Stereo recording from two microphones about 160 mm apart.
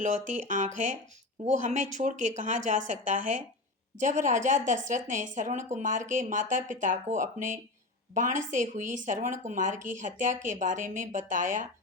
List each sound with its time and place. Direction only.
0.0 s speech: 50° right (ahead or behind)